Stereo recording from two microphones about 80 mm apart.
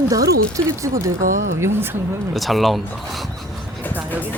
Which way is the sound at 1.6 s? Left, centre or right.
Right.